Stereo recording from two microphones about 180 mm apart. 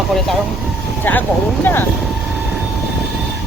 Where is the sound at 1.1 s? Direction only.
10° left (ahead or behind).